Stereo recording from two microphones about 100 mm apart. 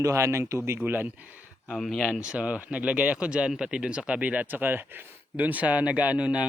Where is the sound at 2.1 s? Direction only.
10° right (ahead or behind).